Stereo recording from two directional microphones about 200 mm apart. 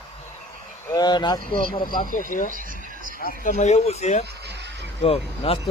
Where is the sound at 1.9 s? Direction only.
45° left (ahead or behind).